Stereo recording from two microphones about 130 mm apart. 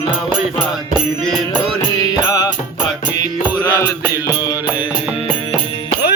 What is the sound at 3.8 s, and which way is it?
Music, 20° left (ahead or behind).